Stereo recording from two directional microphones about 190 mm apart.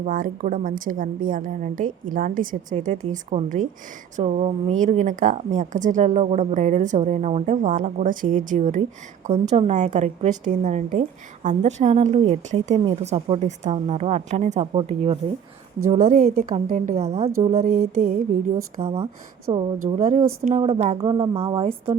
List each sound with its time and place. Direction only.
0.0 s a woman's voice: 45° right (ahead or behind)
15.9 s a woman's voice: 40° right (ahead or behind)
18.8 s a woman's voice: 30° right (ahead or behind)
19.8 s a woman's voice: 40° right (ahead or behind)